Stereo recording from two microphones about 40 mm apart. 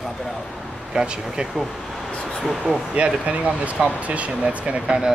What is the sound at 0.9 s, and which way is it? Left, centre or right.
Speech, centre.